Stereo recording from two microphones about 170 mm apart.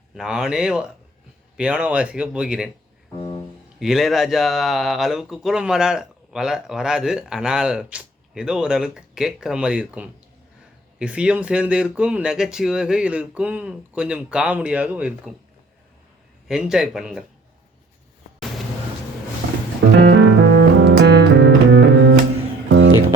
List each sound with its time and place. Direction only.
0.1 s speech: 5° right (ahead or behind)
3.8 s speech: centre (ahead or behind)
16.5 s speech: 5° right (ahead or behind)
20.0 s music: 75° right (ahead or behind)